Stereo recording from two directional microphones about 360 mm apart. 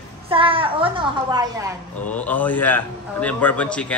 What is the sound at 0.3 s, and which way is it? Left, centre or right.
A woman's voice, centre.